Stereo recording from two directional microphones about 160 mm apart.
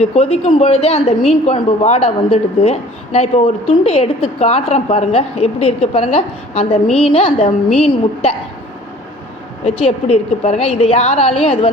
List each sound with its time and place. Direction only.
0.0 s a woman's voice: 40° left (ahead or behind)
9.6 s a woman's voice: 40° left (ahead or behind)